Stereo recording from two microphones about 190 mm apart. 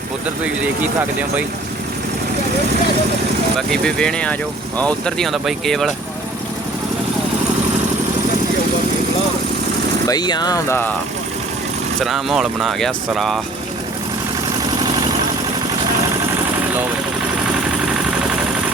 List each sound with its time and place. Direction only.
3.7 s speech: 5° left (ahead or behind)
10.1 s speech: 20° left (ahead or behind)
11.9 s speech: centre (ahead or behind)